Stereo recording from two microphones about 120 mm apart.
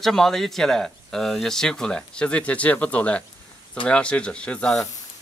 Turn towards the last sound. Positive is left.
turn(degrees=5)  # may be behind; listen again after turning